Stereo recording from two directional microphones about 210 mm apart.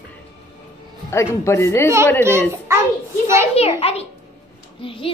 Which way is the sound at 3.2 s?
10° right (ahead or behind).